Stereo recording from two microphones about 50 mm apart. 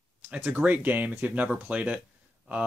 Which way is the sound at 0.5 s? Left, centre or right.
Right.